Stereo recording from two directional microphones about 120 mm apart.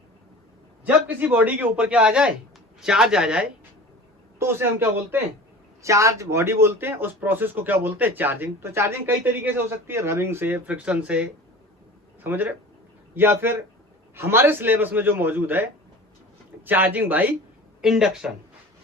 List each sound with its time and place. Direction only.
0.9 s speech: 15° right (ahead or behind)
4.4 s a man's voice: 20° right (ahead or behind)
17.8 s speech: 5° right (ahead or behind)